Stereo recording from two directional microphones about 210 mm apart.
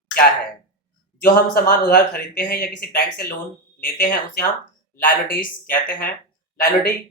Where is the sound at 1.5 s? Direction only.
45° left (ahead or behind).